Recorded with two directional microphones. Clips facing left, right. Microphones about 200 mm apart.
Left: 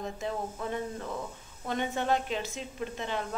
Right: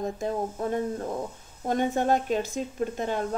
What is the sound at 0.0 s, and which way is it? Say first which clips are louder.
Speech: right 6 dB; 40° right (ahead or behind).